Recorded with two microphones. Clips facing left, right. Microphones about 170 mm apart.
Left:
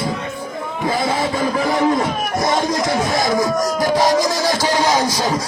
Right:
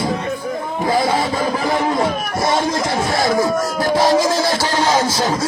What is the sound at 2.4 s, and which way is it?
Speech, 15° left (ahead or behind).